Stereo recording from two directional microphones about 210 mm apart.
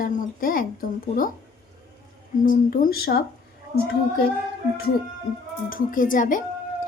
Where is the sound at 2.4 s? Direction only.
40° left (ahead or behind).